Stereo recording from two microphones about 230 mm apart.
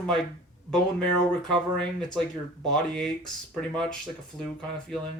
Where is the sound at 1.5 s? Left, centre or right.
Centre.